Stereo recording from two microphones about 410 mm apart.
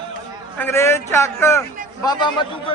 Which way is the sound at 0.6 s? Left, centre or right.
Centre.